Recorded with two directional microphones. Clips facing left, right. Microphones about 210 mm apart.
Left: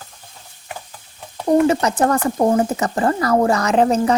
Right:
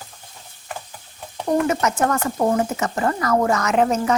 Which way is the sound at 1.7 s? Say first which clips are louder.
Left 4 dB; 35° left (ahead or behind).